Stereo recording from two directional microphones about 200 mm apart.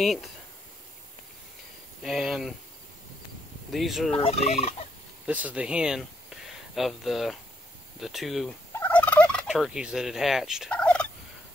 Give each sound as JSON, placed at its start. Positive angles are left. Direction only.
{"t": 0.0, "sound": "speech", "side_deg": 0}
{"t": 2.0, "sound": "speech", "side_deg": 0}
{"t": 3.7, "sound": "speech", "side_deg": 0}
{"t": 4.2, "sound": "fowl", "side_deg": 30}
{"t": 5.2, "sound": "speech", "side_deg": -5}
{"t": 8.7, "sound": "fowl", "side_deg": 10}